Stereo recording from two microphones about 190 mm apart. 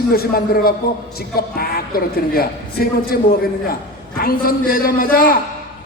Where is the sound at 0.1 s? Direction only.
50° left (ahead or behind).